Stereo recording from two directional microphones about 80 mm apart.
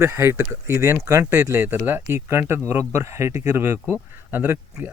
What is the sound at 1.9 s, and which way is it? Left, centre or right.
Speech, right.